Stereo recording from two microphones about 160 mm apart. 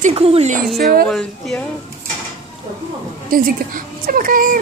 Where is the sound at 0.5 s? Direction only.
65° right (ahead or behind).